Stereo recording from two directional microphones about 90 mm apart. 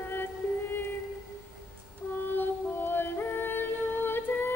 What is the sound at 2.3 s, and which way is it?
Yodeling, 25° left (ahead or behind).